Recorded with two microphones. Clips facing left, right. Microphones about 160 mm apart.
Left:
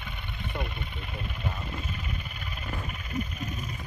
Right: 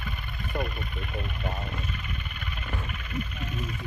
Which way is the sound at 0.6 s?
25° left (ahead or behind).